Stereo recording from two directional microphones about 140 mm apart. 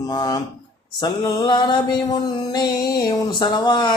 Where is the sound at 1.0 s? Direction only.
30° left (ahead or behind).